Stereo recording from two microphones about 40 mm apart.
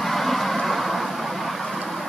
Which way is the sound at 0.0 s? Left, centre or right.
Centre.